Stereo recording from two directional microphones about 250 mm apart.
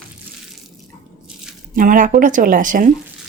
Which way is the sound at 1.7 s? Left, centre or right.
Right.